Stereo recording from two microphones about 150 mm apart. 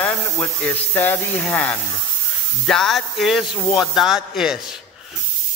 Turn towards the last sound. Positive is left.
turn(degrees=-5)  # may be behind; listen again after turning